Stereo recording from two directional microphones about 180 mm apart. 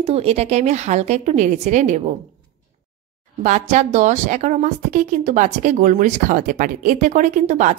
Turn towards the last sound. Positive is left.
turn(degrees=-40)  # may be behind; listen again after turning